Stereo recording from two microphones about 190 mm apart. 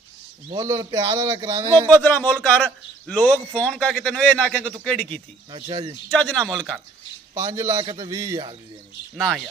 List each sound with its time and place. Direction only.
0.6 s a man's voice: 15° right (ahead or behind)
1.9 s a man's voice: 10° left (ahead or behind)
5.5 s a man's voice: 25° right (ahead or behind)
6.0 s a man's voice: 5° left (ahead or behind)
7.3 s a man's voice: 15° right (ahead or behind)
9.1 s a man's voice: centre (ahead or behind)